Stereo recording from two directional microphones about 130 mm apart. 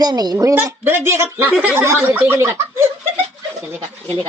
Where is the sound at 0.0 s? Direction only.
30° right (ahead or behind).